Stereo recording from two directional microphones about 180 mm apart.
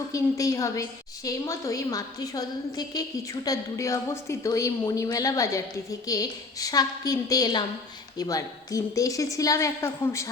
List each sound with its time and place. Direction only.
0.1 s a woman's voice: 20° left (ahead or behind)